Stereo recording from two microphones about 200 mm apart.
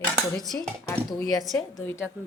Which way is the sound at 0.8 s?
15° left (ahead or behind).